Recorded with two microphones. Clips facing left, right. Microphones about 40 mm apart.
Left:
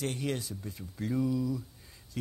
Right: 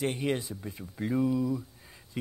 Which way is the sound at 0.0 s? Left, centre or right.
Right.